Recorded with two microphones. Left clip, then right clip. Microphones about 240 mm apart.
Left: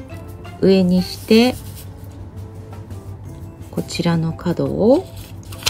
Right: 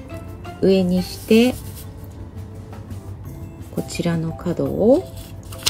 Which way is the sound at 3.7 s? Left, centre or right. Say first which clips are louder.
Left 3 dB; centre.